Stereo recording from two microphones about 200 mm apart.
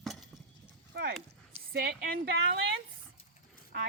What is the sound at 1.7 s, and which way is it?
Speech, 50° right (ahead or behind).